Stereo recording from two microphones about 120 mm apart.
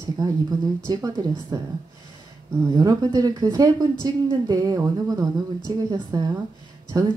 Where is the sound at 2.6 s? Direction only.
30° right (ahead or behind).